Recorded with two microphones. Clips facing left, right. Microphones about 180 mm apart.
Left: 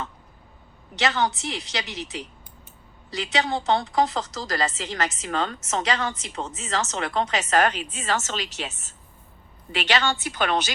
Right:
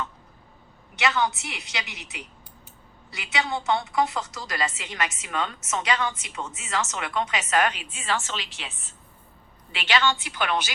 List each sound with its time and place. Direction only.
0.9 s a woman's voice: 35° left (ahead or behind)